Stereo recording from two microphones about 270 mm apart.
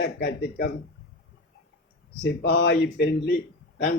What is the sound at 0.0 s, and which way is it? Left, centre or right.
Speech, left.